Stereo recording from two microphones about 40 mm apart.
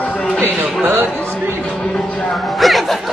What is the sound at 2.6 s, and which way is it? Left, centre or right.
Music, centre.